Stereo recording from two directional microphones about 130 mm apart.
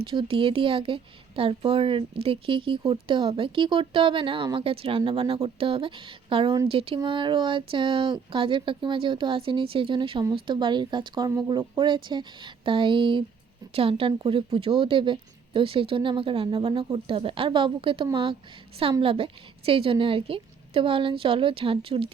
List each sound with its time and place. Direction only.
0.0 s a woman's voice: 40° right (ahead or behind)